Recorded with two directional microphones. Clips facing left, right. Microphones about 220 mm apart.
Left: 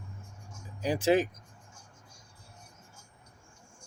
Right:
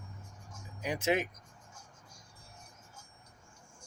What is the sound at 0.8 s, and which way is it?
Speech, 30° left (ahead or behind).